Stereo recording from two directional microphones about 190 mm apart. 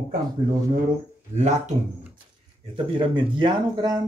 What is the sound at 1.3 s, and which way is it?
Speech, 40° right (ahead or behind).